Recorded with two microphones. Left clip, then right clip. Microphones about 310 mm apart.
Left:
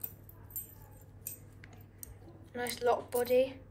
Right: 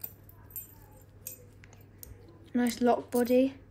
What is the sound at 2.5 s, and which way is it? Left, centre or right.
A woman's voice, right.